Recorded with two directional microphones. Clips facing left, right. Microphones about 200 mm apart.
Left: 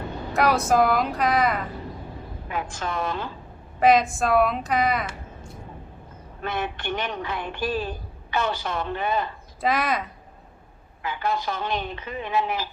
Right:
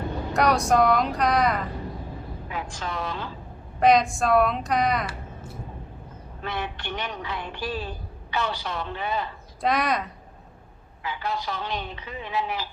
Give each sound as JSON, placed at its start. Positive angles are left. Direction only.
{"t": 0.3, "sound": "speech", "side_deg": 0}
{"t": 2.5, "sound": "speech", "side_deg": 50}
{"t": 3.8, "sound": "a woman's voice", "side_deg": 0}
{"t": 6.4, "sound": "speech", "side_deg": 50}
{"t": 9.6, "sound": "speech", "side_deg": 0}
{"t": 11.0, "sound": "speech", "side_deg": 50}